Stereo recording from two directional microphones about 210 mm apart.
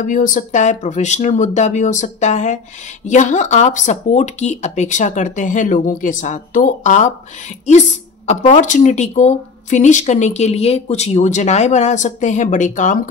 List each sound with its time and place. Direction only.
0.0 s speech: 40° left (ahead or behind)
8.3 s speech: 35° left (ahead or behind)